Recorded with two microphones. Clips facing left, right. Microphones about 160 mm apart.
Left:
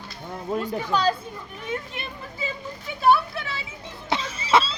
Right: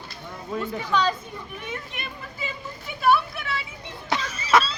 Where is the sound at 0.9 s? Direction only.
35° left (ahead or behind).